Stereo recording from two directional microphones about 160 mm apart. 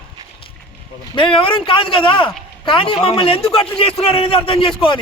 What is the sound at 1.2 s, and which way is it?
A man's voice, 30° left (ahead or behind).